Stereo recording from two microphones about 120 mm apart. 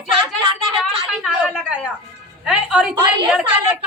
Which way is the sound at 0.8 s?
5° right (ahead or behind).